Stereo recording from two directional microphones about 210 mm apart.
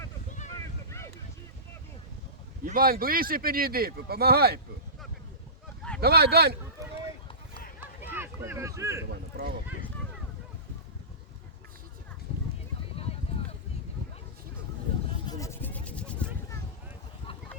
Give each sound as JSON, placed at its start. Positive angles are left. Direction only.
{"t": 0.3, "sound": "boat", "side_deg": 35}
{"t": 0.9, "sound": "boat", "side_deg": 15}
{"t": 2.6, "sound": "speech", "side_deg": -45}
{"t": 6.0, "sound": "speech", "side_deg": -50}
{"t": 8.0, "sound": "speech", "side_deg": -10}
{"t": 9.3, "sound": "speech", "side_deg": -50}
{"t": 12.3, "sound": "a sound", "side_deg": 30}
{"t": 15.3, "sound": "a sound", "side_deg": 15}